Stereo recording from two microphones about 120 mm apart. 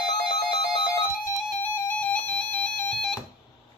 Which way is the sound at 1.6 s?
10° left (ahead or behind).